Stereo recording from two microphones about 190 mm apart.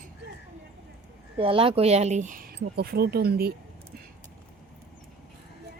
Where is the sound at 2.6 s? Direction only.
55° right (ahead or behind).